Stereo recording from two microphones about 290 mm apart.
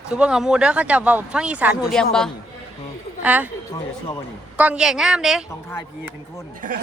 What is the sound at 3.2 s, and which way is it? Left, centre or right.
Speech, centre.